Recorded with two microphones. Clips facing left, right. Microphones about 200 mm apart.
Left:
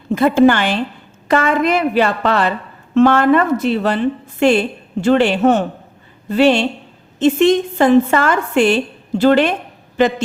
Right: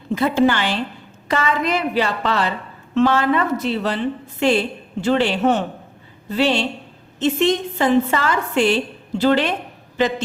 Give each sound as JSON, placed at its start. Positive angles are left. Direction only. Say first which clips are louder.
{"t": 0.1, "sound": "a woman's voice", "louder": "left 5 dB", "side_deg": 55}